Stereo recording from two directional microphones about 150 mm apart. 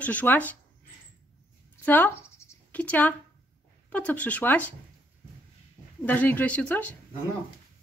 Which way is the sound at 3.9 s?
10° left (ahead or behind).